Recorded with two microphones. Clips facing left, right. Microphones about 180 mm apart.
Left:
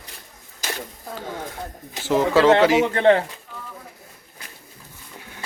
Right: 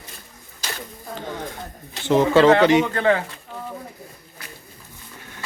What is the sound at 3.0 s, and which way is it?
Speech, 30° left (ahead or behind).